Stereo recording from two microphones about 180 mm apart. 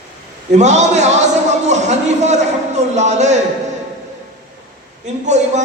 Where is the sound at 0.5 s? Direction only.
40° right (ahead or behind).